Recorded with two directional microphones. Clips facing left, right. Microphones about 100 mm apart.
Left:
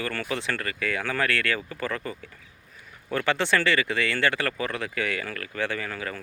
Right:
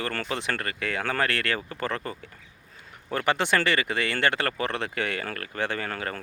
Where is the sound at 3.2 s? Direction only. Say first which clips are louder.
Even; 20° right (ahead or behind).